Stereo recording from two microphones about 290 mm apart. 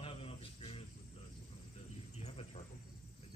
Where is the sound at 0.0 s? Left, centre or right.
Centre.